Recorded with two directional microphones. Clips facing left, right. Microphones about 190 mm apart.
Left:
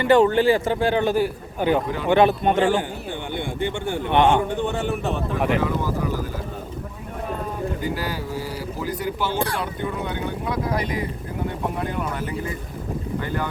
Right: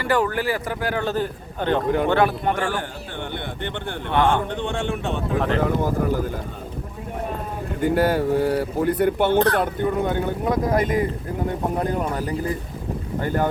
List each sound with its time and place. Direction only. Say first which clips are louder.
0.0 s a man's voice: left 6 dB; 25° left (ahead or behind)
1.0 s a man's voice: left 3 dB; 10° left (ahead or behind)
2.0 s a man's voice: left 2 dB; 20° left (ahead or behind); by 5.2 s 5° left (ahead or behind)
5.5 s speech: right 2 dB; 50° right (ahead or behind)
7.8 s speech: right 8 dB; 60° right (ahead or behind)
9.6 s speech: right 6 dB; 45° right (ahead or behind)